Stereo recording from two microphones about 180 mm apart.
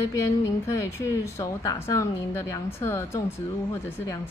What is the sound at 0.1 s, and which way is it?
A woman's voice, 15° left (ahead or behind).